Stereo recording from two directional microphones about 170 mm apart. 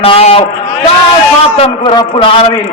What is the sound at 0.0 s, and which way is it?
Speech, 35° left (ahead or behind).